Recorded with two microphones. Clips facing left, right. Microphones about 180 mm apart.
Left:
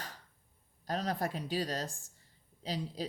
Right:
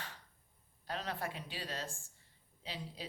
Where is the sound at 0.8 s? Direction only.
40° left (ahead or behind).